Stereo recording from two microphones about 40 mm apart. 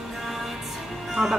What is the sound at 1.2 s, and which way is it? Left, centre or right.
Speech, right.